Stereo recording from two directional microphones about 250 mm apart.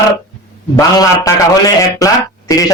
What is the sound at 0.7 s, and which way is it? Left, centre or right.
A man's voice, centre.